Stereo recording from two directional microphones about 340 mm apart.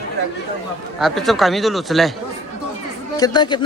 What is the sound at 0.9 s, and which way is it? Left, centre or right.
A man's voice, centre.